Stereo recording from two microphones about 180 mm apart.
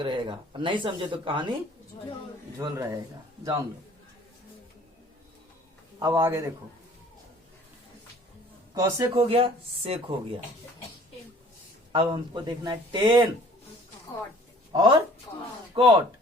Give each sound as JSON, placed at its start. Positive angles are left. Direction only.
{"t": 0.0, "sound": "speech", "side_deg": -25}
{"t": 2.6, "sound": "a man's voice", "side_deg": -15}
{"t": 6.0, "sound": "a man's voice", "side_deg": -20}
{"t": 8.7, "sound": "a man's voice", "side_deg": -20}
{"t": 9.1, "sound": "speech", "side_deg": -30}
{"t": 11.9, "sound": "speech", "side_deg": -30}
{"t": 14.7, "sound": "speech", "side_deg": -25}